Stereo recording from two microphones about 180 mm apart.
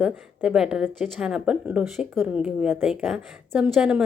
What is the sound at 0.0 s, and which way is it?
A woman's voice, 5° right (ahead or behind).